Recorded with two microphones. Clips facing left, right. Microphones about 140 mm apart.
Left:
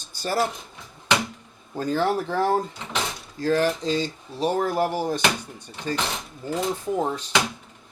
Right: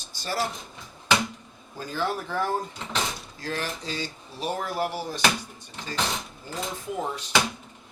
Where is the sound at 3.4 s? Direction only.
45° left (ahead or behind).